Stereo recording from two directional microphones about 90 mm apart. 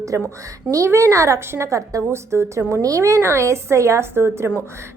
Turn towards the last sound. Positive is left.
turn(degrees=-25)  # may be behind; listen again after turning